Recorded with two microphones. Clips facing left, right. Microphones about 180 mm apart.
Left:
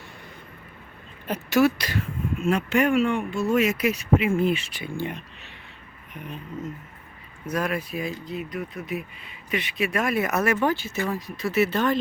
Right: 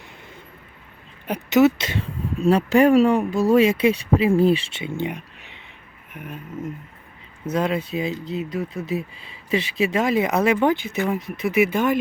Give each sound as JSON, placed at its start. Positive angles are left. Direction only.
{"t": 1.3, "sound": "speech", "side_deg": -20}
{"t": 2.4, "sound": "speech", "side_deg": -35}
{"t": 7.4, "sound": "speech", "side_deg": -20}